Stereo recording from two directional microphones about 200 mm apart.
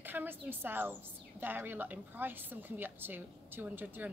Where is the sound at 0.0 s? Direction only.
10° right (ahead or behind).